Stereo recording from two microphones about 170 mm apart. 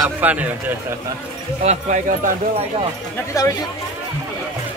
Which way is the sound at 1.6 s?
45° right (ahead or behind).